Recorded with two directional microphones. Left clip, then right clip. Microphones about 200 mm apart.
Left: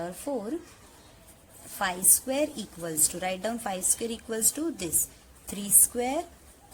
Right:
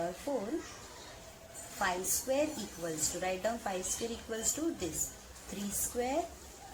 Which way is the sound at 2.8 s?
55° left (ahead or behind).